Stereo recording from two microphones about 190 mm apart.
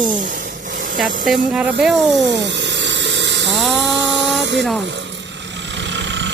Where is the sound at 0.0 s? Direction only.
45° right (ahead or behind).